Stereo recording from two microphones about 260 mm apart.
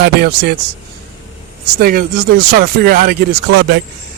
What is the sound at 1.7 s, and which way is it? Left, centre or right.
Speech, right.